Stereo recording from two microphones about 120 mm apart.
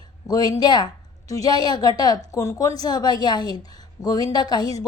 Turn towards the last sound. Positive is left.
turn(degrees=35)  # may be behind; listen again after turning